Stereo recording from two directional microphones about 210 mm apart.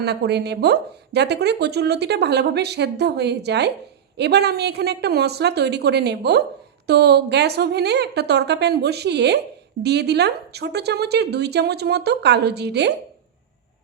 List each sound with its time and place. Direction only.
0.0 s speech: 50° right (ahead or behind)